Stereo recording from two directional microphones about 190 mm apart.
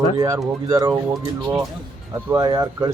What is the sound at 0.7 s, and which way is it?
Speech, 20° right (ahead or behind).